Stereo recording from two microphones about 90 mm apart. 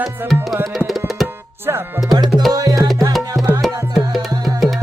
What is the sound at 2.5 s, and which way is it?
Music, 40° right (ahead or behind).